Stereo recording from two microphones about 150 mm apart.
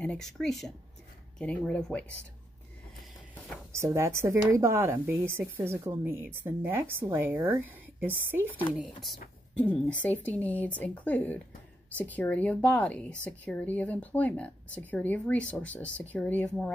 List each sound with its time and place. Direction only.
0.0 s speech: 5° left (ahead or behind)
3.7 s speech: 20° right (ahead or behind)
8.7 s speech: centre (ahead or behind)